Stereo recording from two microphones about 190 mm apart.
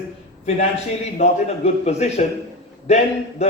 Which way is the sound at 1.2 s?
35° left (ahead or behind).